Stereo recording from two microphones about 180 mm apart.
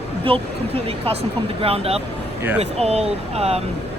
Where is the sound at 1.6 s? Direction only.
35° right (ahead or behind).